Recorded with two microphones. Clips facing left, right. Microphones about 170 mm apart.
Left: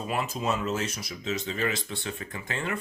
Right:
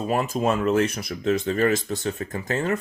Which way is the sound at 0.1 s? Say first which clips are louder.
Right 6 dB; 50° right (ahead or behind).